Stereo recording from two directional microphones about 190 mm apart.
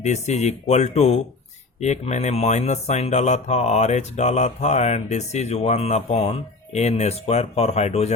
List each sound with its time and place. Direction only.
0.0 s speech: 35° left (ahead or behind)